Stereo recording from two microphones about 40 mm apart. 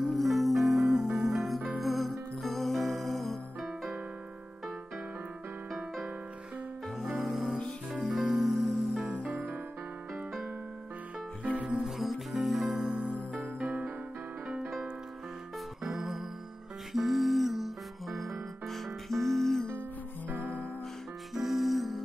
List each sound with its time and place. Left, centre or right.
0.0 s music: centre
7.2 s music: centre
9.1 s music: right
10.1 s keyboard: centre
11.4 s music: right
11.8 s music: centre
12.9 s music: right
15.8 s music: centre
20.2 s music: right
21.4 s music: centre